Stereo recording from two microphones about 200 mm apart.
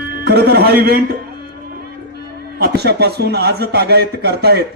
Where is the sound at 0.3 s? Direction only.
55° right (ahead or behind).